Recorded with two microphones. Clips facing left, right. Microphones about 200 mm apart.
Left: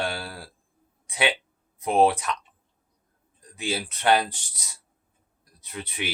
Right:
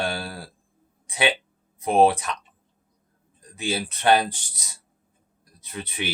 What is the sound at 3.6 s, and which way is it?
Speech, 25° right (ahead or behind).